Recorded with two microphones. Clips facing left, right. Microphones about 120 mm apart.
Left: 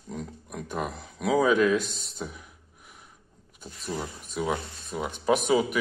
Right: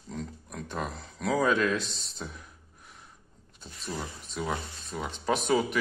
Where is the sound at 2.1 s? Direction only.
10° left (ahead or behind).